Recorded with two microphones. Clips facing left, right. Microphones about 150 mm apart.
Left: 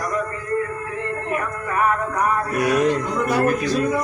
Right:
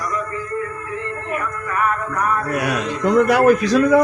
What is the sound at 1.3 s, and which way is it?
Music, 25° left (ahead or behind).